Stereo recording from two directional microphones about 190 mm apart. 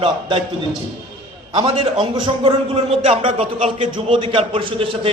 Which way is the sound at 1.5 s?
25° right (ahead or behind).